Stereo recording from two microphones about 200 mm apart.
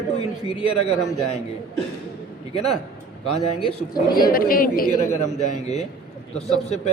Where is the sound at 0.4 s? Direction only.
30° left (ahead or behind).